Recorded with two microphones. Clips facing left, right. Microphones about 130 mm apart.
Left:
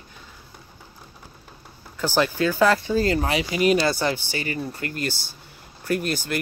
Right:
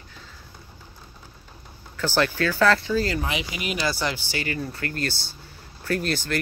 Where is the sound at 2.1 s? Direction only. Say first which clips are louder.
Left 2 dB; 15° left (ahead or behind).